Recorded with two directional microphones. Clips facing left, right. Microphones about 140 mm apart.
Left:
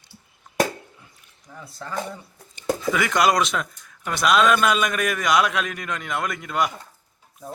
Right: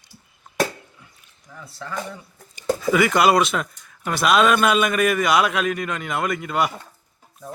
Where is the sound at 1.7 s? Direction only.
35° left (ahead or behind).